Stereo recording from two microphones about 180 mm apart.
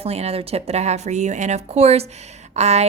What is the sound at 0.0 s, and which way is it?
A woman's voice, 35° right (ahead or behind).